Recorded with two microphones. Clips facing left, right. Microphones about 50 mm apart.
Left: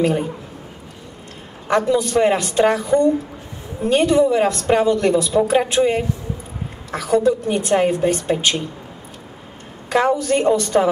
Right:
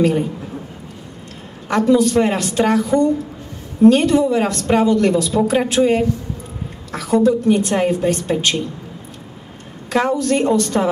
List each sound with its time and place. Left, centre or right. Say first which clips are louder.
1.7 s a woman's voice: right 3 dB; centre
9.8 s a woman's voice: even; centre